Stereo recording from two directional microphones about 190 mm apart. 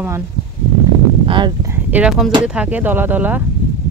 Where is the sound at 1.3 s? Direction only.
25° right (ahead or behind).